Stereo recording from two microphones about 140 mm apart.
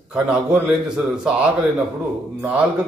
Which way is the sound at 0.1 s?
5° right (ahead or behind).